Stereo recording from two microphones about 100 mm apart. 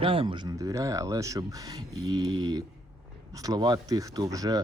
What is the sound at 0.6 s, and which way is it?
Speech, 35° right (ahead or behind).